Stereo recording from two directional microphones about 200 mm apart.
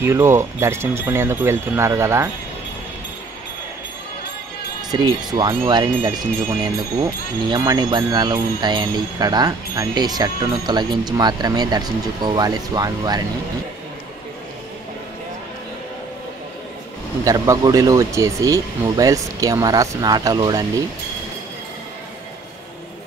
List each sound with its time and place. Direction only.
0.0 s speech: 15° right (ahead or behind)
4.9 s speech: 20° right (ahead or behind)
17.2 s speech: 15° right (ahead or behind)